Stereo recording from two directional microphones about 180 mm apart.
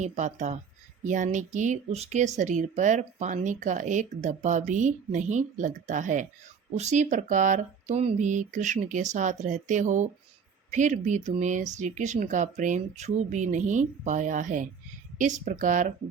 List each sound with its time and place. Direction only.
0.0 s speech: 40° right (ahead or behind)